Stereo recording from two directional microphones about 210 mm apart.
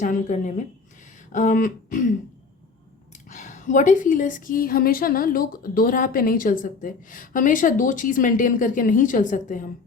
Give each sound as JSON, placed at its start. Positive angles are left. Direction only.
{"t": 0.0, "sound": "a woman's voice", "side_deg": 35}
{"t": 3.2, "sound": "a woman's voice", "side_deg": 35}